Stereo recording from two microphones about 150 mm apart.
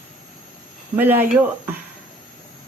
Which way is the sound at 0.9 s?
15° right (ahead or behind).